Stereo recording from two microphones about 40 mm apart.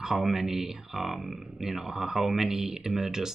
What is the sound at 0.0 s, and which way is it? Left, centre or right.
Speech, centre.